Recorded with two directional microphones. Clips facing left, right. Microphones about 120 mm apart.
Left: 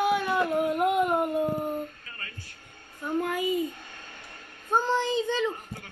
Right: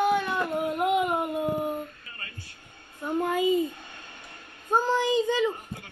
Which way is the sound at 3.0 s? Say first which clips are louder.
Right 3 dB; 20° right (ahead or behind).